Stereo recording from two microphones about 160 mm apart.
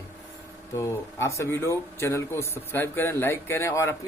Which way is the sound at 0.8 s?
20° left (ahead or behind).